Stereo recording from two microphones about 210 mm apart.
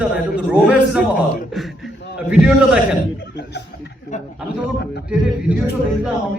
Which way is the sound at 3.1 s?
50° left (ahead or behind).